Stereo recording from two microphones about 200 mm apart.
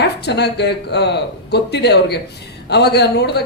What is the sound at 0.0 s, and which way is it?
A woman's voice, 55° left (ahead or behind).